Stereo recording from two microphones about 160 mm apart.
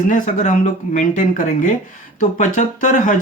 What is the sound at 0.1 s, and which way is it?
Speech, 55° left (ahead or behind).